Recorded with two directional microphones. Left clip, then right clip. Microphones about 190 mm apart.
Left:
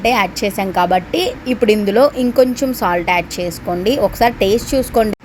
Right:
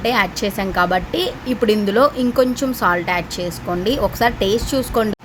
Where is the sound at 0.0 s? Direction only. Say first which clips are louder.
Left 3 dB; 10° left (ahead or behind).